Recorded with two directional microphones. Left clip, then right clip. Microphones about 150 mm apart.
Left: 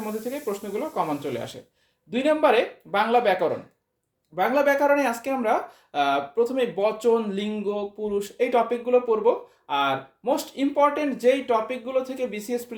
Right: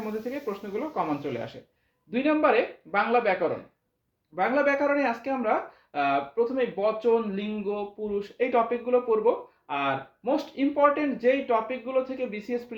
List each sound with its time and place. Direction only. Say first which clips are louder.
0.0 s speech: left 2 dB; 30° left (ahead or behind)
4.4 s speech: left 3 dB; 40° left (ahead or behind)